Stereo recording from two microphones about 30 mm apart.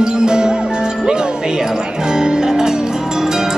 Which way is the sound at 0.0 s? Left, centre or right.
Right.